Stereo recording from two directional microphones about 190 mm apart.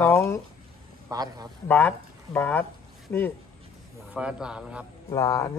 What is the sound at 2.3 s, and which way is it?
Speech, 10° left (ahead or behind).